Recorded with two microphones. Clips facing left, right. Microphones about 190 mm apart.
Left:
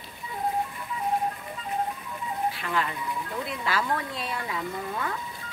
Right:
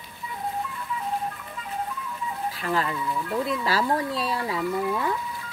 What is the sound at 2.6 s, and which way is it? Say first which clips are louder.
Speech: right 3 dB; 35° right (ahead or behind).